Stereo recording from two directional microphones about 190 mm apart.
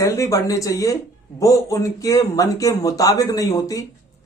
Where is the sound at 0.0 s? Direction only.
15° left (ahead or behind).